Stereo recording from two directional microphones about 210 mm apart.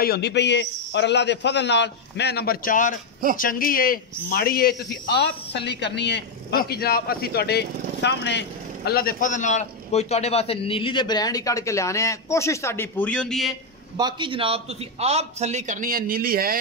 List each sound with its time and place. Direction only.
0.0 s a man's voice: 50° left (ahead or behind); by 13.5 s 5° left (ahead or behind)
13.9 s a man's voice: 20° right (ahead or behind); by 16.5 s 45° right (ahead or behind)